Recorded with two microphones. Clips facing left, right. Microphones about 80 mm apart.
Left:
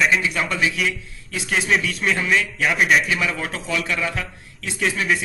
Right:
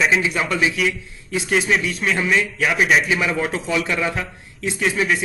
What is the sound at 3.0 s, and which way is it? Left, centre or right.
A man's voice, centre.